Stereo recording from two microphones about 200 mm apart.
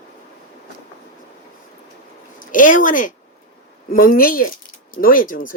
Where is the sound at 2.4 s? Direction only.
40° left (ahead or behind).